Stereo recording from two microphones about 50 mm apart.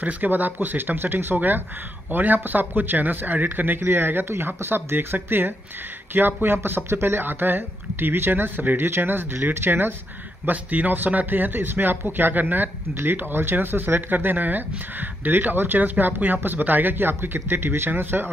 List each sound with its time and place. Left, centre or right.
0.0 s a man's voice: right
10.4 s a man's voice: right